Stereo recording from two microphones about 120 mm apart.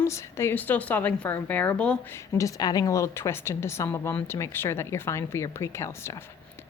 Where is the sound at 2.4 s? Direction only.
30° left (ahead or behind).